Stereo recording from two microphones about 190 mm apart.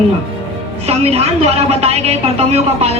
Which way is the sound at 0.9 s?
35° right (ahead or behind).